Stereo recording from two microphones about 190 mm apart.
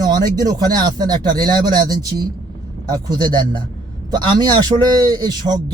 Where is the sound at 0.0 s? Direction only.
20° right (ahead or behind).